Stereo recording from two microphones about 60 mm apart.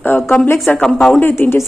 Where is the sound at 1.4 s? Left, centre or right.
Left.